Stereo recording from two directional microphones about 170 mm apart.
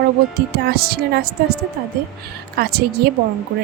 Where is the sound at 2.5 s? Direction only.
70° right (ahead or behind).